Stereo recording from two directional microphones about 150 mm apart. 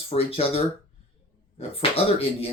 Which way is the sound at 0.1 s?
40° left (ahead or behind).